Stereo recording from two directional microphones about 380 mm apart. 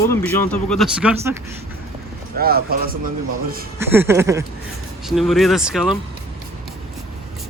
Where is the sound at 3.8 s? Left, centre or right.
Centre.